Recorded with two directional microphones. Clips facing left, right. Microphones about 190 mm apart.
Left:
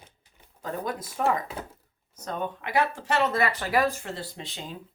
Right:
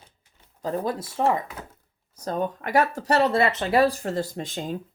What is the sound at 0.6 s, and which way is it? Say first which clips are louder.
Speech: right 5 dB; 30° right (ahead or behind).